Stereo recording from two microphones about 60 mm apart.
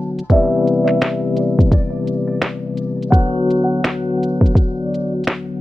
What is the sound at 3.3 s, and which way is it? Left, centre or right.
Music, centre.